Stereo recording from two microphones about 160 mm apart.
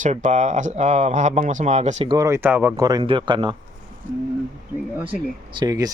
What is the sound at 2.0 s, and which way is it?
Speech, 20° right (ahead or behind).